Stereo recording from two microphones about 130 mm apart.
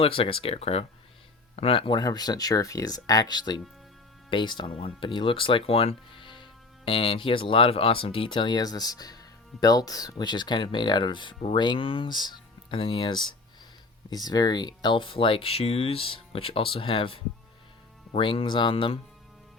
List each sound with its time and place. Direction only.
0.0 s speech: 45° left (ahead or behind)
2.0 s speech: 30° left (ahead or behind)
18.2 s speech: 40° left (ahead or behind)